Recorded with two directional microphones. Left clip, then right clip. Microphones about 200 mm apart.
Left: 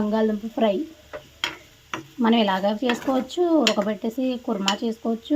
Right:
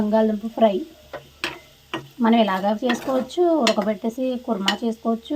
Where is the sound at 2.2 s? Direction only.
5° left (ahead or behind).